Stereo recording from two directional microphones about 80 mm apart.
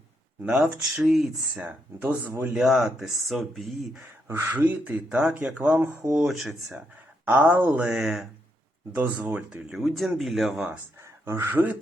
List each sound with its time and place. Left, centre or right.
0.4 s speech: centre
1.6 s speech: right
2.5 s speech: centre
4.3 s speech: right
6.1 s speech: centre
7.3 s speech: centre
8.0 s speech: centre
9.0 s speech: right
9.2 s speech: centre
9.7 s speech: centre
11.0 s speech: right